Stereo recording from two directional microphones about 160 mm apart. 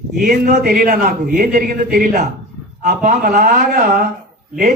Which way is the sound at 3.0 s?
60° right (ahead or behind).